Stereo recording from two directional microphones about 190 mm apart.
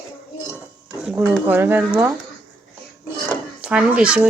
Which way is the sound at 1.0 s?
5° right (ahead or behind).